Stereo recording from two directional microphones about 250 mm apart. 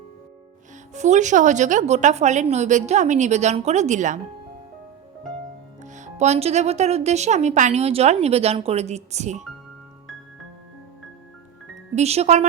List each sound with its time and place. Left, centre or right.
0.9 s speech: right
5.8 s speech: right
11.9 s speech: right